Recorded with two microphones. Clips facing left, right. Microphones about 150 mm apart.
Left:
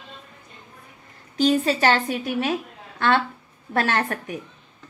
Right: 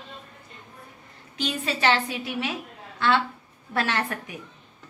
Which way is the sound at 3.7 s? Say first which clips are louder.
Left 4 dB; 50° left (ahead or behind).